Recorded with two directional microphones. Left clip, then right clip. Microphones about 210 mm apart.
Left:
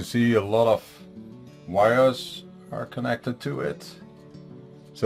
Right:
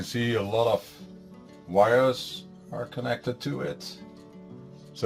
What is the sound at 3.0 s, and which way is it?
Speech, 45° left (ahead or behind).